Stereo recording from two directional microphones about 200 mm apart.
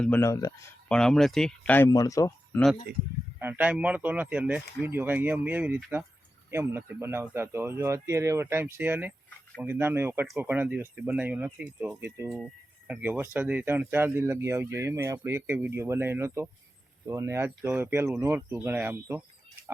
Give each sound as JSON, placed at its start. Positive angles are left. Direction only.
{"t": 0.0, "sound": "speech", "side_deg": 10}
{"t": 0.9, "sound": "speech", "side_deg": 5}
{"t": 3.3, "sound": "speech", "side_deg": -10}